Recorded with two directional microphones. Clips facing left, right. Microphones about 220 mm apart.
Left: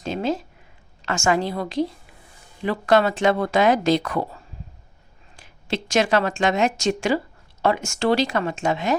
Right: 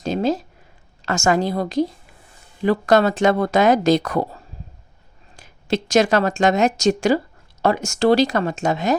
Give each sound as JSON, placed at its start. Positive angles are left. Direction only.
{"t": 0.0, "sound": "a sound", "side_deg": -40}
{"t": 1.0, "sound": "speech", "side_deg": -40}
{"t": 5.4, "sound": "speech", "side_deg": -40}